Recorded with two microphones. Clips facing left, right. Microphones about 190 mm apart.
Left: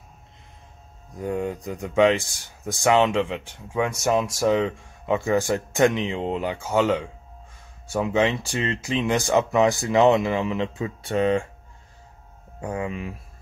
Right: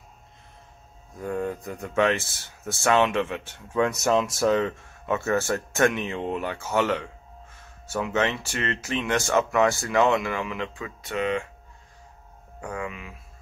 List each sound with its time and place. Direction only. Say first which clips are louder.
1.2 s speech: left 2 dB; 15° left (ahead or behind); by 11.4 s 30° left (ahead or behind)
12.5 s speech: left 4 dB; 25° left (ahead or behind)